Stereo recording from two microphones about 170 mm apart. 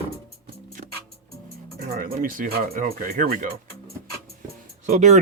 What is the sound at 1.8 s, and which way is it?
Speech, 60° right (ahead or behind).